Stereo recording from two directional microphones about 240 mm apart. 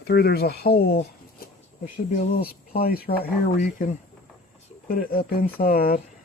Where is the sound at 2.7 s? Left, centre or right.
Left.